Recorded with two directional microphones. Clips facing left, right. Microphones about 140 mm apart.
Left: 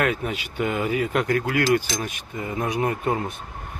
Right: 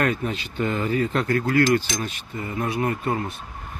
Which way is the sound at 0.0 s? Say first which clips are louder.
Even; 10° left (ahead or behind).